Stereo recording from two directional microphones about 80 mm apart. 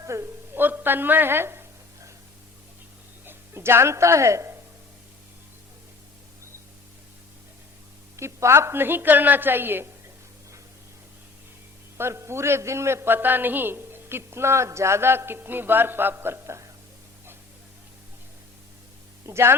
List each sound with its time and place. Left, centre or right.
0.0 s a woman's voice: right
0.5 s a woman's voice: right
3.2 s speech: right
8.1 s a woman's voice: right
11.9 s a man's voice: right
19.2 s a man's voice: right